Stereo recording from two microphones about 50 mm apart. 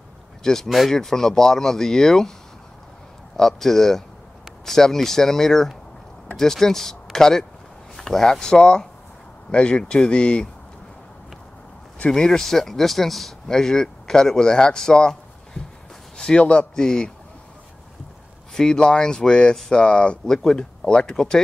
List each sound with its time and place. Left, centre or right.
0.4 s speech: centre
3.3 s speech: centre
12.1 s speech: centre
18.5 s speech: centre
20.2 s speech: centre